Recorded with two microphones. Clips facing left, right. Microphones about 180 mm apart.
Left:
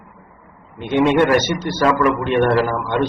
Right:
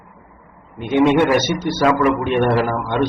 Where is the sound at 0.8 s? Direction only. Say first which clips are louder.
Right 1 dB; 10° right (ahead or behind).